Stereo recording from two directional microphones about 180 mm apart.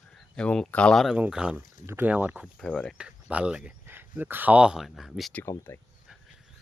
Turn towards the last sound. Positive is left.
turn(degrees=15)  # may be behind; listen again after turning